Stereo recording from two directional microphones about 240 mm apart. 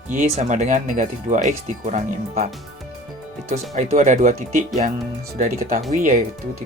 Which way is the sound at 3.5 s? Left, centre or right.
Right.